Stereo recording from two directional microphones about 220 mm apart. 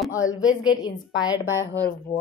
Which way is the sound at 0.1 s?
15° left (ahead or behind).